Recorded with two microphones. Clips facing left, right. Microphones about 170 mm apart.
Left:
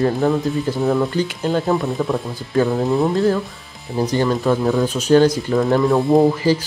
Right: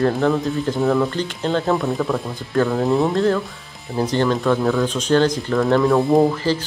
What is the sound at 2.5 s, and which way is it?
Speech, 15° left (ahead or behind).